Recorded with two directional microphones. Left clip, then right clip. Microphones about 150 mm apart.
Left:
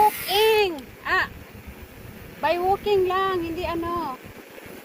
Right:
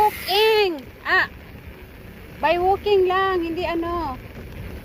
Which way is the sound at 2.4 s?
65° right (ahead or behind).